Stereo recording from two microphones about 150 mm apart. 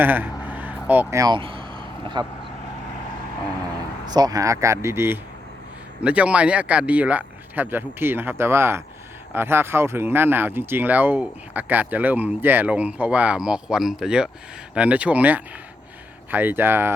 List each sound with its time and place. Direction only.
0.0 s a sound: 15° right (ahead or behind)
1.2 s vehicle: 35° right (ahead or behind)
4.1 s speech: 25° right (ahead or behind)